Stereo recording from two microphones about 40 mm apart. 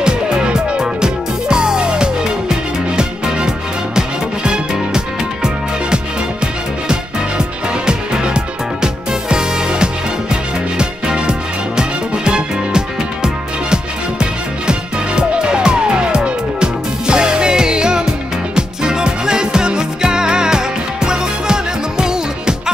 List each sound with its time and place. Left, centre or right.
0.0 s music: right